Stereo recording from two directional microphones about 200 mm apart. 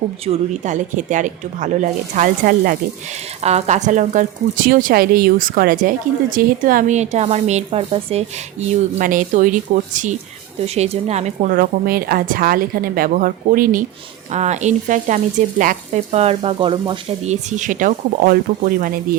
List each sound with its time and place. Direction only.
0.3 s frying: 35° right (ahead or behind)
3.4 s a woman's voice: 35° right (ahead or behind)
6.3 s frying: 45° right (ahead or behind)
9.0 s frying: 40° right (ahead or behind)
10.8 s a woman's voice: 30° right (ahead or behind)
14.3 s frying: 35° right (ahead or behind)